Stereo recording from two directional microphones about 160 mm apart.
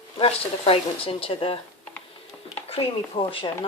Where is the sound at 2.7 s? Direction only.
35° left (ahead or behind).